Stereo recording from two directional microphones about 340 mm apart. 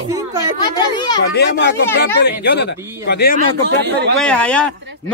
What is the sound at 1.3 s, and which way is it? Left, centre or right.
Speech, left.